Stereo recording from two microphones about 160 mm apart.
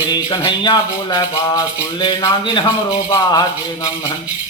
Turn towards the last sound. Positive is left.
turn(degrees=25)  # may be behind; listen again after turning